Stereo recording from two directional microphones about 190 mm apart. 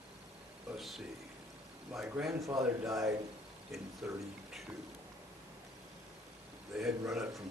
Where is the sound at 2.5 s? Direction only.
15° right (ahead or behind).